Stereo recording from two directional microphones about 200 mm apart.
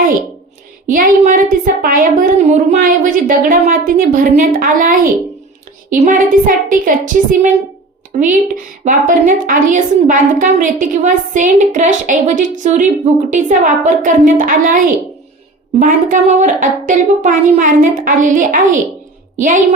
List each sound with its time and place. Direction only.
0.9 s a woman's voice: 40° right (ahead or behind)